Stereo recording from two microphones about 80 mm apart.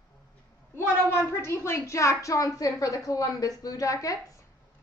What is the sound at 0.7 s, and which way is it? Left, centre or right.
A woman's voice, left.